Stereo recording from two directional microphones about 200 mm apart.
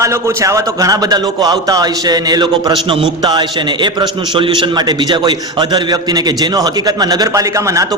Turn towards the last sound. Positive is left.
turn(degrees=-15)  # may be behind; listen again after turning